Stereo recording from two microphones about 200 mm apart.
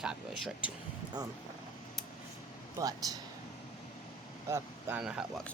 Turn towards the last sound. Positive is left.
turn(degrees=-5)  # may be behind; listen again after turning